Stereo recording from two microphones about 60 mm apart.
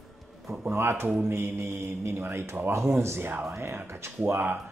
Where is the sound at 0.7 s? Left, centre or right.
Right.